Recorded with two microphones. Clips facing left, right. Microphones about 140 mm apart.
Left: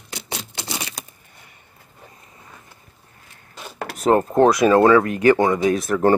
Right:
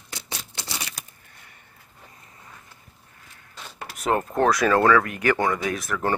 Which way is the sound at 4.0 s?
30° left (ahead or behind).